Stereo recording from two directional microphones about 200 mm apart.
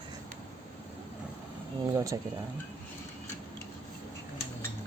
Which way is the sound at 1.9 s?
15° right (ahead or behind).